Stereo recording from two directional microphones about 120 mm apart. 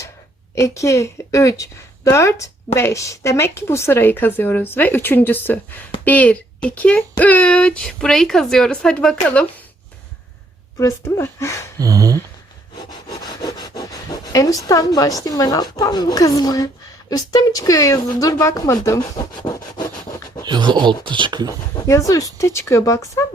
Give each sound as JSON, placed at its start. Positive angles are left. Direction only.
{"t": 0.5, "sound": "speech", "side_deg": 25}
{"t": 10.8, "sound": "speech", "side_deg": 25}
{"t": 11.8, "sound": "a sound", "side_deg": -30}
{"t": 12.9, "sound": "speech", "side_deg": 35}
{"t": 19.5, "sound": "rub", "side_deg": 35}
{"t": 20.4, "sound": "speech", "side_deg": -40}
{"t": 21.8, "sound": "speech", "side_deg": 25}